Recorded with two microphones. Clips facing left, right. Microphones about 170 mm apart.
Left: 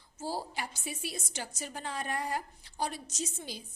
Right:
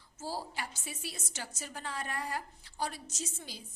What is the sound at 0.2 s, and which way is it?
A woman's voice, 15° left (ahead or behind).